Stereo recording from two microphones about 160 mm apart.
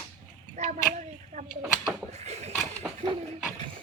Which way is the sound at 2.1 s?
45° right (ahead or behind).